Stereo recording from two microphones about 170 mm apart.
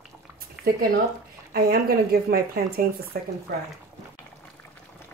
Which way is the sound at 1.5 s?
60° right (ahead or behind).